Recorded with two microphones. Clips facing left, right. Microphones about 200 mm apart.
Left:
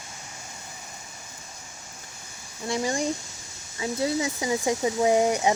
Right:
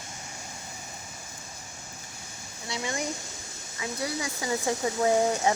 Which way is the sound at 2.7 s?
45° left (ahead or behind).